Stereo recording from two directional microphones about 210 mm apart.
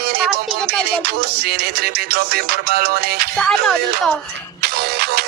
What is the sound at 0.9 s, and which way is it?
Music, 50° right (ahead or behind).